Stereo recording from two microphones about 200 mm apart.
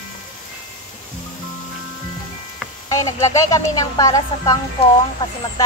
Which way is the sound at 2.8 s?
15° left (ahead or behind).